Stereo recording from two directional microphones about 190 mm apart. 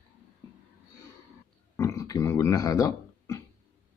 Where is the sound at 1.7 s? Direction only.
15° left (ahead or behind).